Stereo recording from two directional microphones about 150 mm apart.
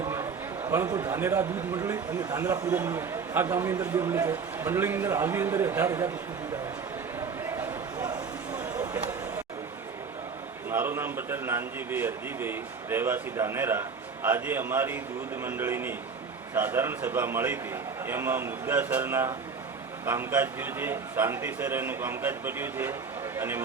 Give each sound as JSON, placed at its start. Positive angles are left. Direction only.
{"t": 0.7, "sound": "speech", "side_deg": -15}
{"t": 8.5, "sound": "a sound", "side_deg": -15}
{"t": 10.7, "sound": "speech", "side_deg": -15}